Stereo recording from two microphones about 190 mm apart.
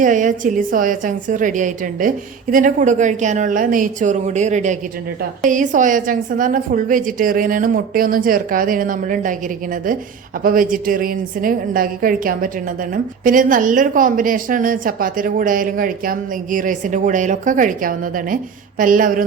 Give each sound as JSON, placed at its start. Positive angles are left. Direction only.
{"t": 0.0, "sound": "a woman's voice", "side_deg": -40}
{"t": 10.4, "sound": "a woman's voice", "side_deg": -45}